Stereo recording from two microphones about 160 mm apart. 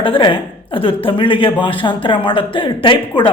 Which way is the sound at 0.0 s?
30° left (ahead or behind).